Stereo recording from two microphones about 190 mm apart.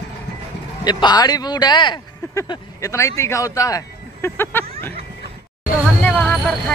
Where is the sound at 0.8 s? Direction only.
20° left (ahead or behind).